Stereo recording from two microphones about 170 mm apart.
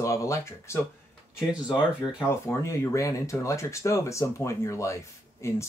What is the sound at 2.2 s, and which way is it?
Speech, 15° left (ahead or behind).